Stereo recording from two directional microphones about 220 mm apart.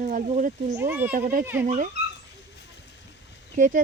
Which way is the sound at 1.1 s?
35° right (ahead or behind).